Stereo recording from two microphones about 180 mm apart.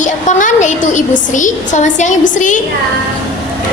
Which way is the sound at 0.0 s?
45° left (ahead or behind).